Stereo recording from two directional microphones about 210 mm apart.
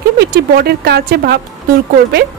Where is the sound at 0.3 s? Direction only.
45° right (ahead or behind).